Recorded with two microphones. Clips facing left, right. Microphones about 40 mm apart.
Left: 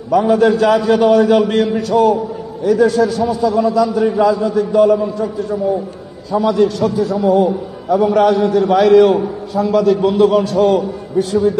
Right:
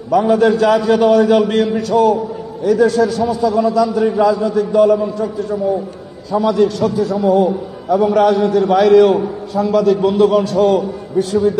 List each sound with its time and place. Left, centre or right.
0.1 s a man's voice: centre